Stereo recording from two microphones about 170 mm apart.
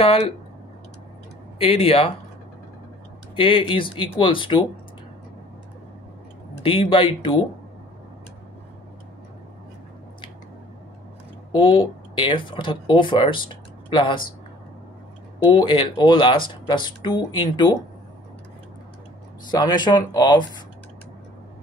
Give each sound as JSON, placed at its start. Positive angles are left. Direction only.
{"t": 0.0, "sound": "speech", "side_deg": 35}
{"t": 1.6, "sound": "speech", "side_deg": 35}
{"t": 3.3, "sound": "speech", "side_deg": 30}
{"t": 6.6, "sound": "speech", "side_deg": 30}
{"t": 11.5, "sound": "speech", "side_deg": 30}
{"t": 15.4, "sound": "speech", "side_deg": 30}
{"t": 19.5, "sound": "speech", "side_deg": 25}